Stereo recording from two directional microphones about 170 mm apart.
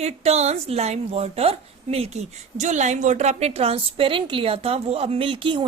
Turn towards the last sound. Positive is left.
turn(degrees=-30)  # may be behind; listen again after turning